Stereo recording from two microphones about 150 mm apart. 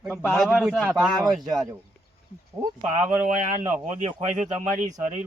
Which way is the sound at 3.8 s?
55° right (ahead or behind).